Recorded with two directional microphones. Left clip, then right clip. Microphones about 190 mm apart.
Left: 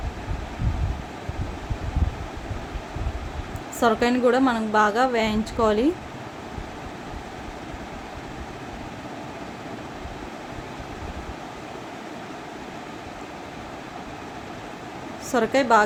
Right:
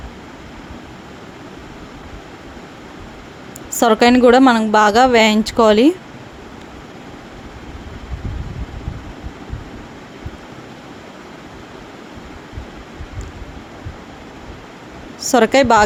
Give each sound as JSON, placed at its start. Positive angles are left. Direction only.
{"t": 3.8, "sound": "a woman's voice", "side_deg": -50}
{"t": 15.2, "sound": "speech", "side_deg": -50}